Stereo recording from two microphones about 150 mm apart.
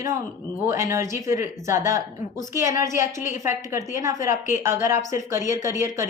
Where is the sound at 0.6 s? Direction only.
20° right (ahead or behind).